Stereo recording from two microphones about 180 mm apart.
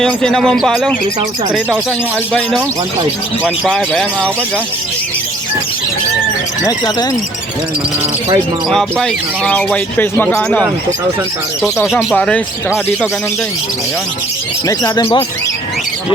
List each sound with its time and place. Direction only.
0.0 s speech: 5° left (ahead or behind)
3.7 s speech: 5° left (ahead or behind)
8.7 s speech: centre (ahead or behind)
14.7 s speech: 20° left (ahead or behind)